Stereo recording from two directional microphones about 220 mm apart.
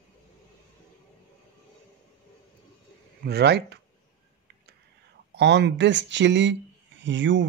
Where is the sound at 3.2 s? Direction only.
50° right (ahead or behind).